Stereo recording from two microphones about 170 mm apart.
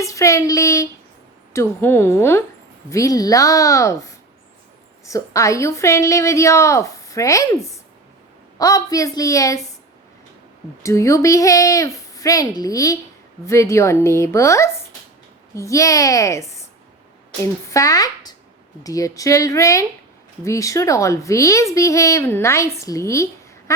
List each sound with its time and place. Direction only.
0.0 s a woman's voice: 20° left (ahead or behind)
10.8 s a woman's voice: 20° left (ahead or behind)